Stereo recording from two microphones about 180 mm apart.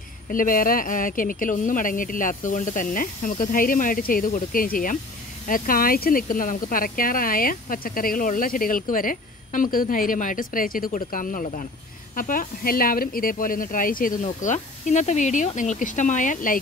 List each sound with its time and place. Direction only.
0.3 s speech: 50° left (ahead or behind)